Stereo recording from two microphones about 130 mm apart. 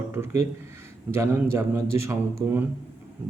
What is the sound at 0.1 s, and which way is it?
A man's voice, 20° right (ahead or behind).